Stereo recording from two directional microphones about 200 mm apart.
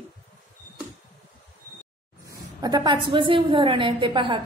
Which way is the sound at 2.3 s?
20° right (ahead or behind).